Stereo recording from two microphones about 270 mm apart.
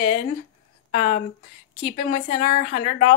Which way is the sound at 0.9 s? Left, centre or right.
Left.